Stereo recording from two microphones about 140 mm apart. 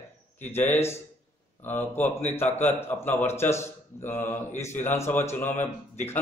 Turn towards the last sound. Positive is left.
turn(degrees=15)  # may be behind; listen again after turning